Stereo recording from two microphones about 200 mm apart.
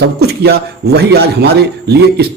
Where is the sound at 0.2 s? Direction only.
55° right (ahead or behind).